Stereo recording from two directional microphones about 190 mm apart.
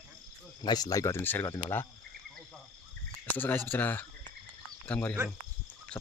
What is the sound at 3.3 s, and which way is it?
Speech, 10° left (ahead or behind).